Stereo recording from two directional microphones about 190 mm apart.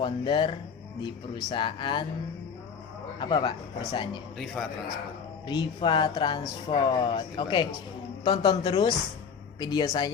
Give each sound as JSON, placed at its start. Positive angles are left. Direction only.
{"t": 0.0, "sound": "speech", "side_deg": 25}
{"t": 3.2, "sound": "speech", "side_deg": 25}
{"t": 4.6, "sound": "a man's voice", "side_deg": 5}
{"t": 5.5, "sound": "speech", "side_deg": 25}